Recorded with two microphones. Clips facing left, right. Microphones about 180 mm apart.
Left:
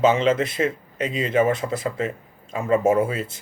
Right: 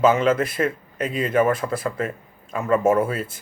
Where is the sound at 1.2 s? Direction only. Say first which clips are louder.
Even; 25° left (ahead or behind).